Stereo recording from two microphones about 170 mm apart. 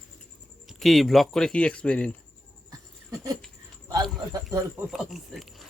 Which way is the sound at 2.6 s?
20° right (ahead or behind).